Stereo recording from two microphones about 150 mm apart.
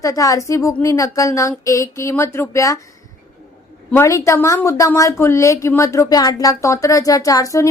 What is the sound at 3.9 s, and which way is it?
A woman's voice, 20° left (ahead or behind).